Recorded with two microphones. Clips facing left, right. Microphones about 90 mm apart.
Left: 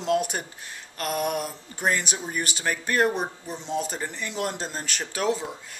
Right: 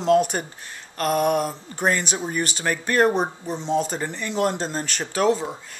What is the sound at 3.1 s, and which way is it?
Speech, 30° right (ahead or behind).